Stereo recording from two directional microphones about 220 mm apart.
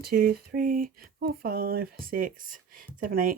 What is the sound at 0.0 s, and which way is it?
Speech, 45° right (ahead or behind).